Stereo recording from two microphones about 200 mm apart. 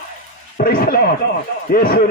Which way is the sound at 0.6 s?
45° left (ahead or behind).